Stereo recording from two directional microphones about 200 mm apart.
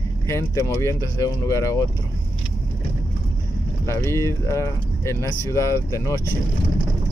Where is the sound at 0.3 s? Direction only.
15° left (ahead or behind).